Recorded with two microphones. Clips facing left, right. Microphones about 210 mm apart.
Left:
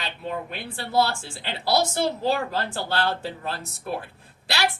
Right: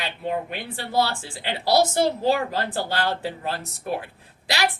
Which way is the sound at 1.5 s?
15° right (ahead or behind).